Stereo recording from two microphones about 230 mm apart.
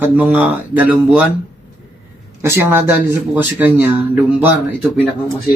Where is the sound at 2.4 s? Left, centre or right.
Centre.